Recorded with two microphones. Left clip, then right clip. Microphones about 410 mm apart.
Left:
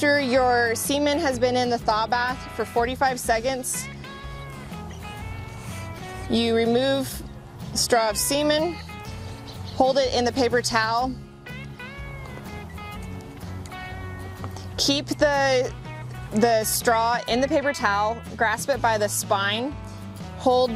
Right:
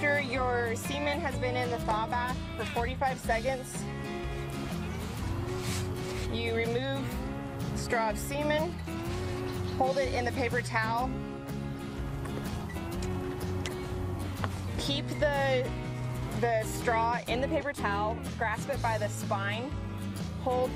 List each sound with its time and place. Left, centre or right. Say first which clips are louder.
0.0 s speech: left 9 dB; left
6.3 s speech: left 11 dB; left
9.9 s speech: left 8 dB; left
14.8 s speech: left 9 dB; left